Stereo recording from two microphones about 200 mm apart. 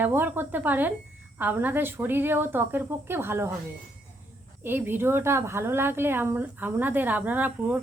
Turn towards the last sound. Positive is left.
turn(degrees=-10)  # may be behind; listen again after turning